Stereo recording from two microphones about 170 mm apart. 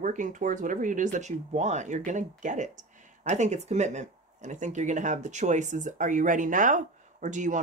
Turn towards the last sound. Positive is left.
turn(degrees=-45)  # may be behind; listen again after turning